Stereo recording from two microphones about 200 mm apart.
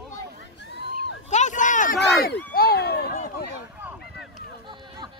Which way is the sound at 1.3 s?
35° left (ahead or behind).